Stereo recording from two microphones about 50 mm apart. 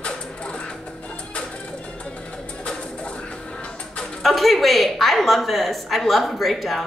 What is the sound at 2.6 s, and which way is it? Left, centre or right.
Music, left.